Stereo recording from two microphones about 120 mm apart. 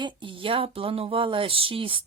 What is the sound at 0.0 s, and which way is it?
Speech, 45° right (ahead or behind).